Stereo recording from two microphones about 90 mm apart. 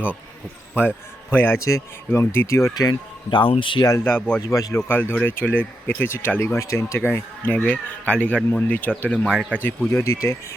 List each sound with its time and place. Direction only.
0.8 s a man's voice: 20° left (ahead or behind)
1.5 s speech: 35° left (ahead or behind)
3.2 s speech: 65° left (ahead or behind)
4.0 s speech: 20° left (ahead or behind)
4.4 s speech: 35° left (ahead or behind)
4.8 s speech: 20° left (ahead or behind)
7.5 s speech: 15° left (ahead or behind)
9.9 s speech: 35° left (ahead or behind)